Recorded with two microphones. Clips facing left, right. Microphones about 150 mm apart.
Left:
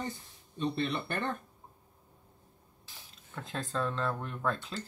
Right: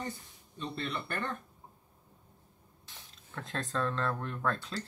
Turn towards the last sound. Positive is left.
turn(degrees=5)  # may be behind; listen again after turning